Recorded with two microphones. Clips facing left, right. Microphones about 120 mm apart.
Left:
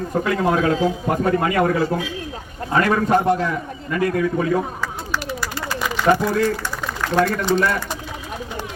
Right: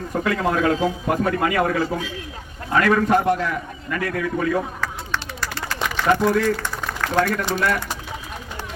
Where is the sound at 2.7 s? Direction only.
30° left (ahead or behind).